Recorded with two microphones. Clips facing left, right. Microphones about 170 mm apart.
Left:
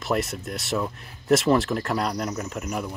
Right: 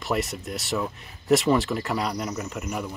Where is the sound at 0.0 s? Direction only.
Centre (ahead or behind).